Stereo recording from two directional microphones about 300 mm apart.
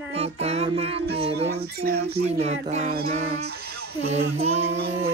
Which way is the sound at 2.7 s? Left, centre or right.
Right.